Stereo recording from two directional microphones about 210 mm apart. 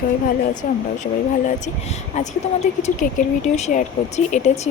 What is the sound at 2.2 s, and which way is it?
Speech, 35° left (ahead or behind).